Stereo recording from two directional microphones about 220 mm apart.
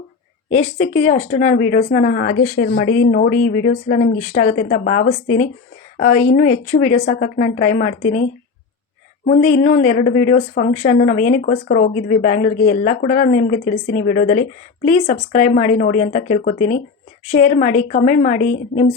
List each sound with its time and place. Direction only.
0.5 s speech: 30° left (ahead or behind)
9.2 s speech: 35° left (ahead or behind)